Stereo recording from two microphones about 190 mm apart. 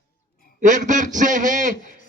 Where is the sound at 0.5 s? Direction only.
40° right (ahead or behind).